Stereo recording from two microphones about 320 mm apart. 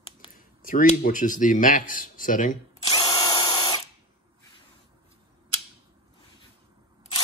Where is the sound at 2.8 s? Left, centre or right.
Centre.